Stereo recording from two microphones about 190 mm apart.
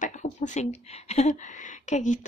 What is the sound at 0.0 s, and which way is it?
Speech, 40° left (ahead or behind).